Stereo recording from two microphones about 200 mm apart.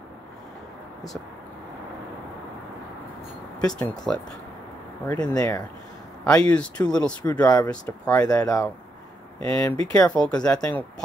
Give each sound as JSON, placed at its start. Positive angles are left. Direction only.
{"t": 3.6, "sound": "speech", "side_deg": 5}
{"t": 5.3, "sound": "speech", "side_deg": 20}
{"t": 6.2, "sound": "speech", "side_deg": 5}